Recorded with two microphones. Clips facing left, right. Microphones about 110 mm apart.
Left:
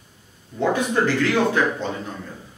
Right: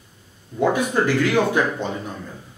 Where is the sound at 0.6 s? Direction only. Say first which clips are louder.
Right 1 dB; 10° right (ahead or behind).